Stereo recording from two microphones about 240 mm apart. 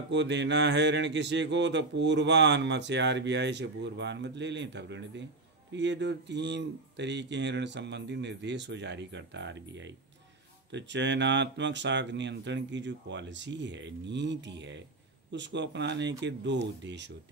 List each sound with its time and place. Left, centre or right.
0.1 s speech: right